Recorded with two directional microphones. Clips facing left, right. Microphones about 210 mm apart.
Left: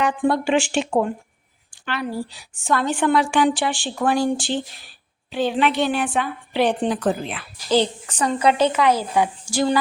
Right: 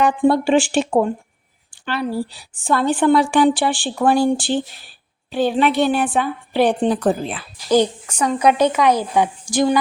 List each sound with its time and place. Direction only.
0.2 s a woman's voice: 30° right (ahead or behind)
5.3 s a woman's voice: 40° right (ahead or behind)
7.7 s speech: 10° right (ahead or behind)